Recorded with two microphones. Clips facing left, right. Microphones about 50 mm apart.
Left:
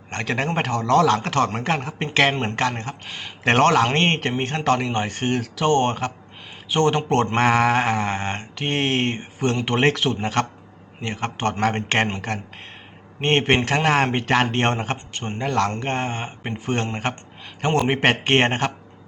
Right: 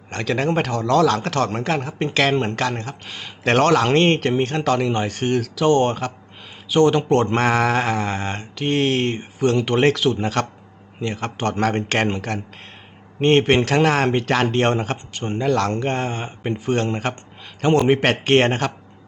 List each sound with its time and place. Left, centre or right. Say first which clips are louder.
0.1 s mantra: right 3 dB; left
4.6 s speech: left 3 dB; left
4.9 s mantra: right 2 dB; left
5.6 s speech: right 2 dB; left
7.3 s mantra: even; centre
16.9 s speech: right 2 dB; centre
17.8 s mantra: right 2 dB; centre